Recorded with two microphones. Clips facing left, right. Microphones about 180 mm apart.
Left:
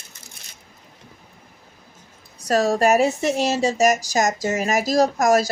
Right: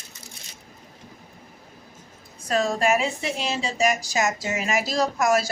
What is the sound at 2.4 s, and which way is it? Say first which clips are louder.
A woman's voice: left 5 dB; 40° left (ahead or behind).